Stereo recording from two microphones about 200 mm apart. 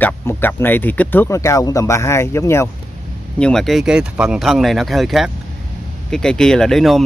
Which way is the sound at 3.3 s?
5° left (ahead or behind).